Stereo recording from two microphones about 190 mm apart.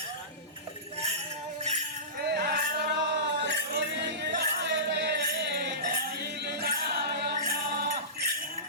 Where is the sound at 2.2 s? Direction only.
55° right (ahead or behind).